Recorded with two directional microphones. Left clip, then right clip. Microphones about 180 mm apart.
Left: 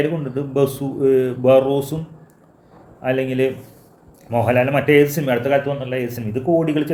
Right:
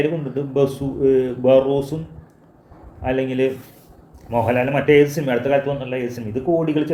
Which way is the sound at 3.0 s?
20° left (ahead or behind).